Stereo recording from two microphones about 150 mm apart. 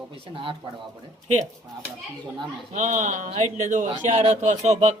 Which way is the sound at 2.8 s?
55° right (ahead or behind).